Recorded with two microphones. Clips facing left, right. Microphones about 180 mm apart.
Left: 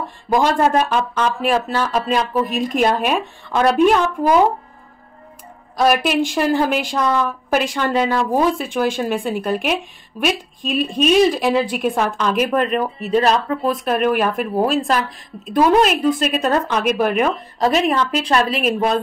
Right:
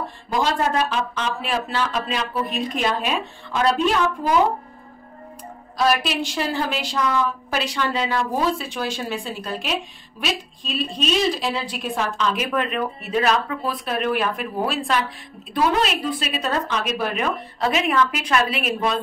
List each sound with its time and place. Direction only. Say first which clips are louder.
0.3 s speech: left 6 dB; 50° left (ahead or behind)
5.8 s speech: left 5 dB; 50° left (ahead or behind)